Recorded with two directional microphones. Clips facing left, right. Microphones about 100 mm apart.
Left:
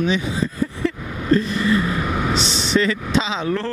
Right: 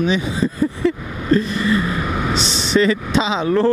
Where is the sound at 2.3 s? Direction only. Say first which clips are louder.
Right 4 dB; 10° right (ahead or behind).